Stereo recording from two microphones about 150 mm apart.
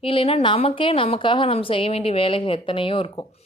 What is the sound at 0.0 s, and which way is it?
Speech, 40° left (ahead or behind).